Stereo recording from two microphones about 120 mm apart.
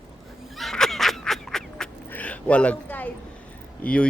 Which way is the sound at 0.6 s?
Centre (ahead or behind).